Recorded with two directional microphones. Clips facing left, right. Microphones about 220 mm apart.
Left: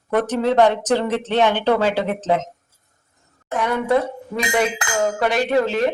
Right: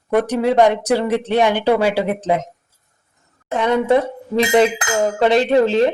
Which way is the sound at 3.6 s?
25° right (ahead or behind).